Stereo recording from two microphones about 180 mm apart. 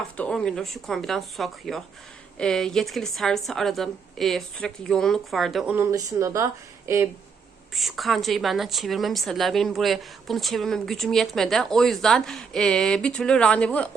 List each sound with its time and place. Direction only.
0.2 s a woman's voice: 5° left (ahead or behind)
5.7 s speech: 15° right (ahead or behind)
7.7 s a woman's voice: centre (ahead or behind)